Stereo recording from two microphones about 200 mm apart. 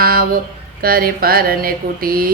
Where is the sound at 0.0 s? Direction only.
50° right (ahead or behind).